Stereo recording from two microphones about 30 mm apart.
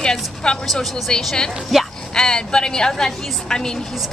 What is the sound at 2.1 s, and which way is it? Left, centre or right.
A woman's voice, left.